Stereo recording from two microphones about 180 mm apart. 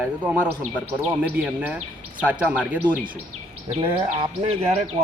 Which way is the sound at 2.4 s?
5° right (ahead or behind).